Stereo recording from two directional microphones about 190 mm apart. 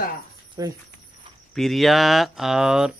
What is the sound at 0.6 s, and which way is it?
Cricket, 20° right (ahead or behind).